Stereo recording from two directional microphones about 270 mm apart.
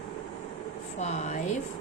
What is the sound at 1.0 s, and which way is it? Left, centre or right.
Speech, left.